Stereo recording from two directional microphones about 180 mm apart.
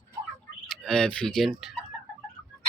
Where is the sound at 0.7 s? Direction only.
5° left (ahead or behind).